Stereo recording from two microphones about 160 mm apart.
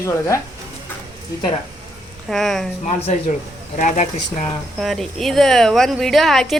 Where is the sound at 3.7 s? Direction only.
50° left (ahead or behind).